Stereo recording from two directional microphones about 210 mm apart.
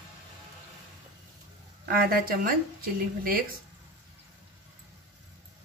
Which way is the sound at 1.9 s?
45° right (ahead or behind).